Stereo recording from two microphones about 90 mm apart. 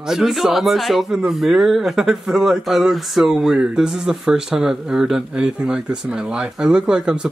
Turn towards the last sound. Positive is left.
turn(degrees=-10)  # may be behind; listen again after turning